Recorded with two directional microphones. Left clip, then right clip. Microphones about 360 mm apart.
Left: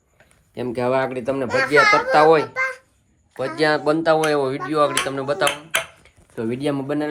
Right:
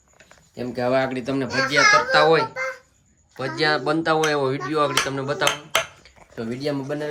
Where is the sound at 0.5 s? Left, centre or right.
Centre.